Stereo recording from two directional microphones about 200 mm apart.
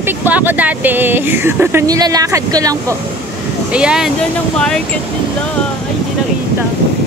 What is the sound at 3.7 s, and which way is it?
Speech, 5° right (ahead or behind).